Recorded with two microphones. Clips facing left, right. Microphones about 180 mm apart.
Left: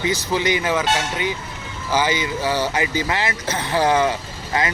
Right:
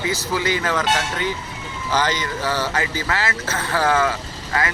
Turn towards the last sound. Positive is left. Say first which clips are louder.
# left 1 dB
turn(degrees=20)  # may be behind; listen again after turning